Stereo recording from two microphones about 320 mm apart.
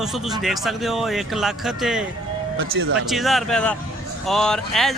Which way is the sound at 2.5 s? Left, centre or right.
Right.